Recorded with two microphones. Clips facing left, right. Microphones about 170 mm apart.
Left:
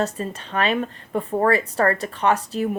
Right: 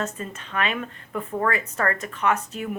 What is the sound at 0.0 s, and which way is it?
Speech, 35° left (ahead or behind).